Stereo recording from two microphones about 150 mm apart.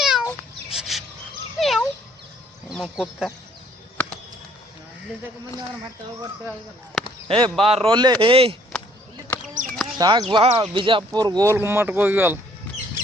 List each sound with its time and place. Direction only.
0.0 s cat: 5° right (ahead or behind)
0.7 s bird: centre (ahead or behind)
1.5 s dog: centre (ahead or behind)
2.6 s speech: 5° right (ahead or behind)
7.3 s speech: 30° right (ahead or behind)
7.9 s speech: 30° right (ahead or behind)
9.3 s a sound: 20° left (ahead or behind)
10.0 s speech: 25° right (ahead or behind)
11.5 s speech: 15° right (ahead or behind)